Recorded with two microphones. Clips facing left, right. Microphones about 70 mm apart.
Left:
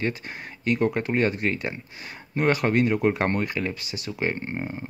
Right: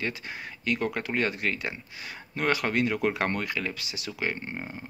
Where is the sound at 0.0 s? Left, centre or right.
Left.